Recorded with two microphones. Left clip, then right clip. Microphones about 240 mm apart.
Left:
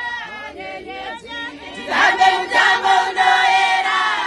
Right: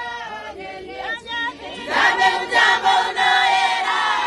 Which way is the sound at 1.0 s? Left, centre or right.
Right.